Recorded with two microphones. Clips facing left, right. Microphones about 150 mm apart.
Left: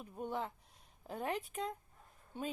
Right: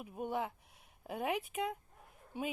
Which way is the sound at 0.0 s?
10° right (ahead or behind).